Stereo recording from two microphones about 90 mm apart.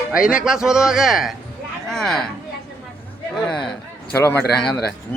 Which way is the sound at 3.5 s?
5° left (ahead or behind).